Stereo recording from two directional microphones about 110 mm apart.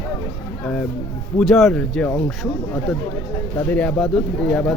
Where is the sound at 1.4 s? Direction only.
Centre (ahead or behind).